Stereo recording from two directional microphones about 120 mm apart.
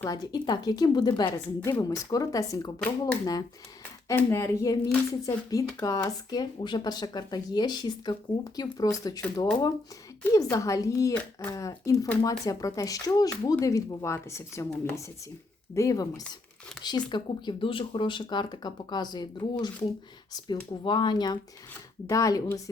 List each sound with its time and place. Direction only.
0.0 s speech: 35° left (ahead or behind)
2.7 s speech: 15° left (ahead or behind); by 9.2 s 30° left (ahead or behind)
10.3 s speech: 30° left (ahead or behind)